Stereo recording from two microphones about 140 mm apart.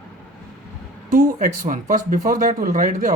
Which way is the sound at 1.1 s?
70° right (ahead or behind).